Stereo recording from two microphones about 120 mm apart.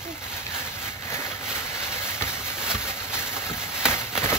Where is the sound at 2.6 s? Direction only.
5° right (ahead or behind).